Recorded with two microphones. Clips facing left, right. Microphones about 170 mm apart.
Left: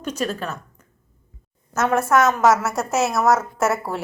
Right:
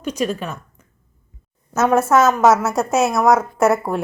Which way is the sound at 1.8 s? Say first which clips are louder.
Right 3 dB; 20° right (ahead or behind).